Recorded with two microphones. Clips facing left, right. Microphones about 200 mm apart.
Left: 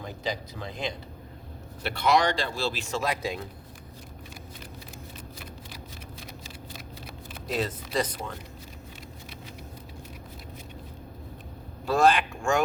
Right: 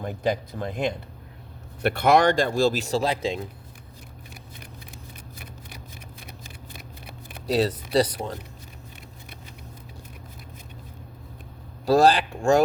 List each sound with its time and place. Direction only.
0.0 s speech: 55° right (ahead or behind); by 3.4 s 25° right (ahead or behind)
7.4 s speech: 35° right (ahead or behind)
11.9 s speech: 35° right (ahead or behind)